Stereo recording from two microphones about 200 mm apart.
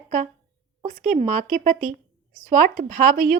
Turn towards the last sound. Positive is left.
turn(degrees=-45)  # may be behind; listen again after turning